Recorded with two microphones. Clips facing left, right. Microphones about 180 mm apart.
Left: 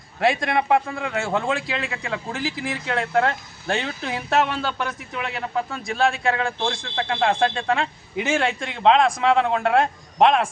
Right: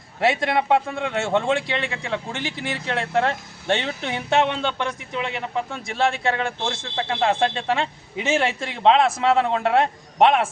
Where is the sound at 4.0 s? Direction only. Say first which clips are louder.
Left 1 dB; 25° right (ahead or behind).